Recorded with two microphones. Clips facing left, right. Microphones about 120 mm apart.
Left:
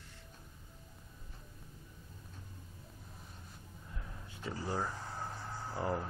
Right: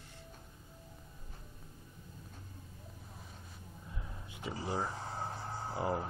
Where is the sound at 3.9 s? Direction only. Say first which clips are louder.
Even; 15° right (ahead or behind).